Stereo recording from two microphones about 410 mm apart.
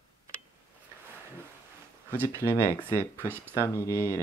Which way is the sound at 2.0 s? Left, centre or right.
Centre.